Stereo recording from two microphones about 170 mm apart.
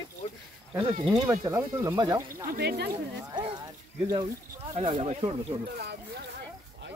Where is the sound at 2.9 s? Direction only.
20° right (ahead or behind).